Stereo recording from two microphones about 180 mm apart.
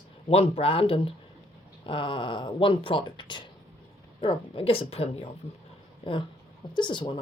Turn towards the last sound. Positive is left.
turn(degrees=30)  # may be behind; listen again after turning